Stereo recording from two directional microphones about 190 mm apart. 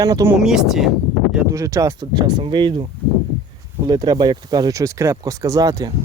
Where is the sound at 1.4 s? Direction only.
15° right (ahead or behind).